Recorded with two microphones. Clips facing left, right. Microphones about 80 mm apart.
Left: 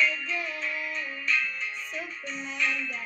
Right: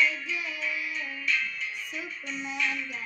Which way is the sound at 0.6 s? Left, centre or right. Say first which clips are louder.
Even; left.